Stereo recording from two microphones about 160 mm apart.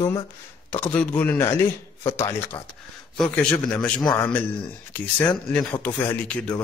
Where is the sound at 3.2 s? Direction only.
5° left (ahead or behind).